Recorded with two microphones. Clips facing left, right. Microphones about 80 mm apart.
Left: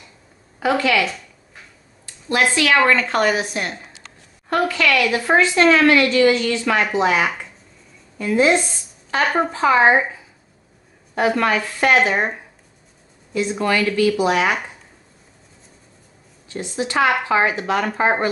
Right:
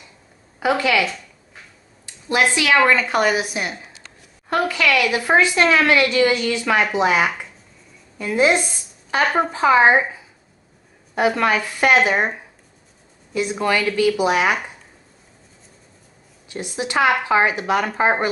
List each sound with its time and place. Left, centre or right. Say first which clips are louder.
0.6 s a woman's voice: even; centre
1.0 s a sound: even; centre
2.2 s a woman's voice: even; centre
13.3 s a woman's voice: even; centre
16.4 s a woman's voice: left 2 dB; centre